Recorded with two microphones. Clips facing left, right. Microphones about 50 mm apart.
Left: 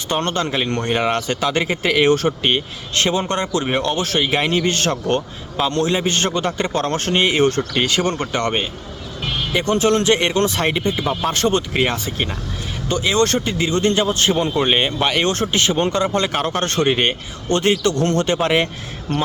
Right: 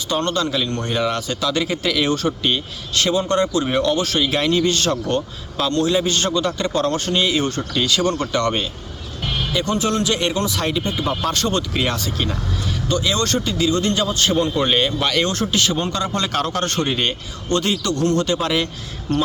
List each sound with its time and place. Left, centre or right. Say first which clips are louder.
0.1 s speech: even; left
9.5 s speech: left 5 dB; left